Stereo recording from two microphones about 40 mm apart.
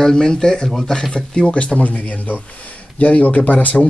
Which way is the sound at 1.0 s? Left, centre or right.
Left.